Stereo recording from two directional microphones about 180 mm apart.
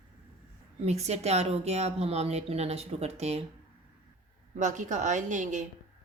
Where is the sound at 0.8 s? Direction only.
35° right (ahead or behind).